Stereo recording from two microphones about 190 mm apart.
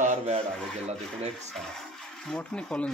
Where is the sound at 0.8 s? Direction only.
35° right (ahead or behind).